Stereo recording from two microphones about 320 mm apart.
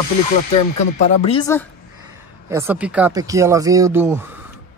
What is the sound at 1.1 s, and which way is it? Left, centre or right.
Speech, centre.